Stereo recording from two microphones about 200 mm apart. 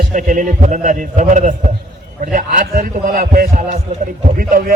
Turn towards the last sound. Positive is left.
turn(degrees=-40)  # may be behind; listen again after turning